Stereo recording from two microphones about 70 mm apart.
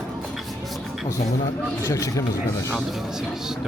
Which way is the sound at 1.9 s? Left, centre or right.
Left.